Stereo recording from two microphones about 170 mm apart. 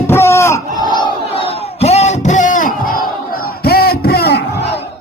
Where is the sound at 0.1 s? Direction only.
15° left (ahead or behind).